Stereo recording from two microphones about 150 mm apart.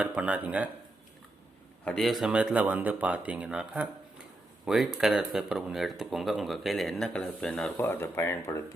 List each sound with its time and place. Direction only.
0.0 s speech: 10° right (ahead or behind)
1.8 s speech: 5° left (ahead or behind)